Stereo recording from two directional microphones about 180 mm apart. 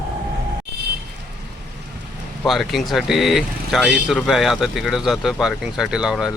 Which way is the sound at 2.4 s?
Centre (ahead or behind).